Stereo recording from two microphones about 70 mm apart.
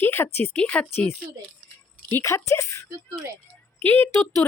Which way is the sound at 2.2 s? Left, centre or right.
Left.